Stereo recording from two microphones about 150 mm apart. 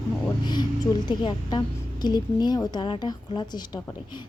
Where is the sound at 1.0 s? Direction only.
30° left (ahead or behind).